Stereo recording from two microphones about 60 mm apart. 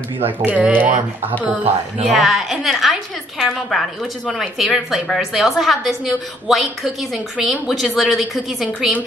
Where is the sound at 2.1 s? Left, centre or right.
Centre.